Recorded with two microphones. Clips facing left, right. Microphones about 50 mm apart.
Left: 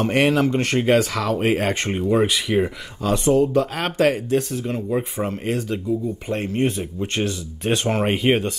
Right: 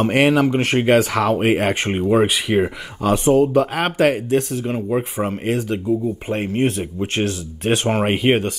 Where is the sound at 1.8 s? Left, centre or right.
Right.